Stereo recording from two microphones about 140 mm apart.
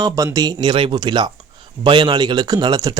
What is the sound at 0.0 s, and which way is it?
Speech, 25° right (ahead or behind).